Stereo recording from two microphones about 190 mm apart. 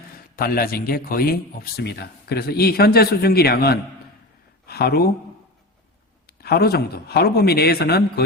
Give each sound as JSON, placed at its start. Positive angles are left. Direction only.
{"t": 0.3, "sound": "a man's voice", "side_deg": 50}
{"t": 6.2, "sound": "a man's voice", "side_deg": 55}